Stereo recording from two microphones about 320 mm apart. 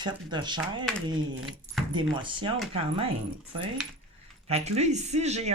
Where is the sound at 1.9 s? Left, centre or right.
Centre.